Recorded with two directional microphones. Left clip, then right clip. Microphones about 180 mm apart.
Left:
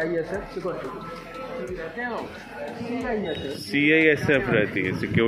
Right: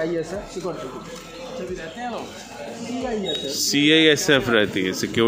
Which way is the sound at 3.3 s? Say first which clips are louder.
Right 6 dB; 30° right (ahead or behind).